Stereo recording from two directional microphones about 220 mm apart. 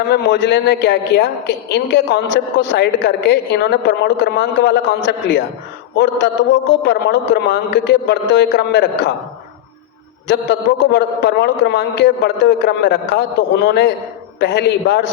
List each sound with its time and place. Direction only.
0.1 s a woman's voice: 50° left (ahead or behind)
10.2 s a woman's voice: 50° left (ahead or behind)